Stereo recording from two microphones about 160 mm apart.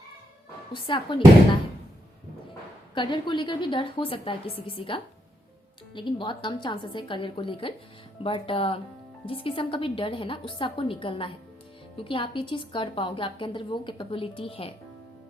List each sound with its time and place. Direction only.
0.7 s a woman's voice: 30° left (ahead or behind)
2.9 s a woman's voice: 30° left (ahead or behind)